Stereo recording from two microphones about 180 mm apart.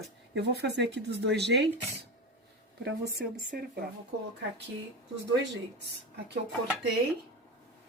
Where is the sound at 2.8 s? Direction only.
55° right (ahead or behind).